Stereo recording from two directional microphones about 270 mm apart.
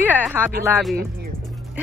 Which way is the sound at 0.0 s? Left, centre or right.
Centre.